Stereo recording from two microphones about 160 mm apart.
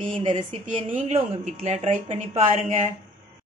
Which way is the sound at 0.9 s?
45° right (ahead or behind).